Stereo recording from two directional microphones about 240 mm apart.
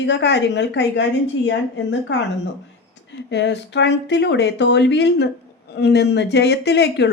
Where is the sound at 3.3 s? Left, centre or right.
Left.